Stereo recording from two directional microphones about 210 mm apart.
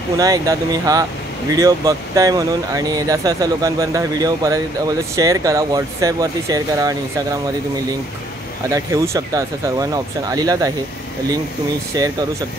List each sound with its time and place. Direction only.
0.2 s speech: 15° right (ahead or behind)
8.6 s speech: 15° right (ahead or behind)
11.9 s speech: 15° right (ahead or behind)